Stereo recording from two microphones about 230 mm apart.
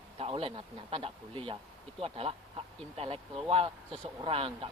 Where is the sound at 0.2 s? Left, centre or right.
Right.